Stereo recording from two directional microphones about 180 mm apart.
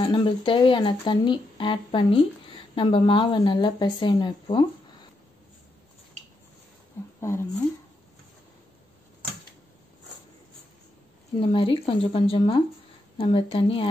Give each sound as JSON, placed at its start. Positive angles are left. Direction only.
{"t": 0.0, "sound": "a woman's voice", "side_deg": 25}
{"t": 7.2, "sound": "speech", "side_deg": 15}
{"t": 11.3, "sound": "a woman's voice", "side_deg": 30}